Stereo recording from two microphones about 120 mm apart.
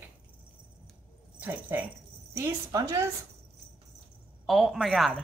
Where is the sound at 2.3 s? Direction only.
25° right (ahead or behind).